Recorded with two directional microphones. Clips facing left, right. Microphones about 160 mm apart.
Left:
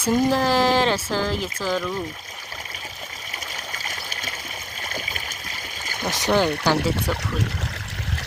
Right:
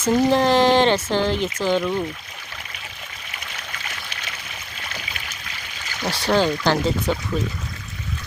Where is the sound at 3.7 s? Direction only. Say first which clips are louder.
Left 1 dB; 40° left (ahead or behind).